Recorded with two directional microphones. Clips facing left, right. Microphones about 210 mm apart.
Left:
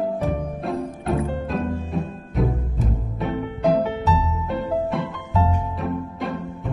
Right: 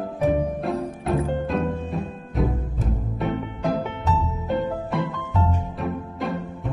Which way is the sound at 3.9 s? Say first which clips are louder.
Left 3 dB; 55° right (ahead or behind).